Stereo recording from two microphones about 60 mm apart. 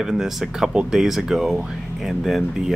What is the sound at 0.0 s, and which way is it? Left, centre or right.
Speech, centre.